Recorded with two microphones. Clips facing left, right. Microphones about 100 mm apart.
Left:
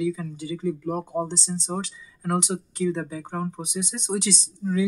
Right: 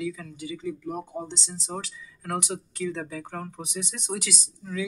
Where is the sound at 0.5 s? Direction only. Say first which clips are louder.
Left 6 dB; 45° left (ahead or behind).